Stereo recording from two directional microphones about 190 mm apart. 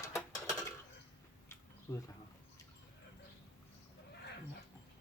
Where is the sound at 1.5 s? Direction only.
15° left (ahead or behind).